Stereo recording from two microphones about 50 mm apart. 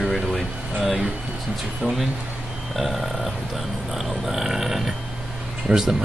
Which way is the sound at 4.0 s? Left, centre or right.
Centre.